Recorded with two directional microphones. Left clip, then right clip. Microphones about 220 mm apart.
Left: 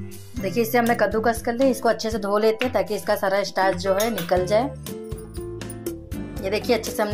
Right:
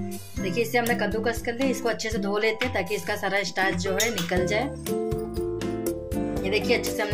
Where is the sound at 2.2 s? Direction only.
20° left (ahead or behind).